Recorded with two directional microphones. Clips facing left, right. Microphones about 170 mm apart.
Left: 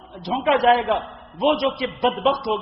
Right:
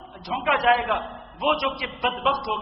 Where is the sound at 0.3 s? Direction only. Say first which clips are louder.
Left 4 dB; 30° left (ahead or behind).